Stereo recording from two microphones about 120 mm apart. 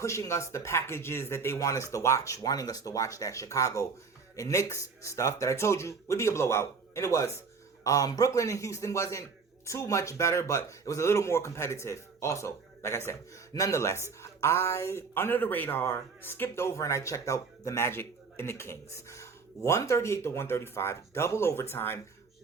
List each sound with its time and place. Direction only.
0.0 s speech: 25° left (ahead or behind)